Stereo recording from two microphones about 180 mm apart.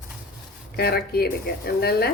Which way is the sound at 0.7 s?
60° left (ahead or behind).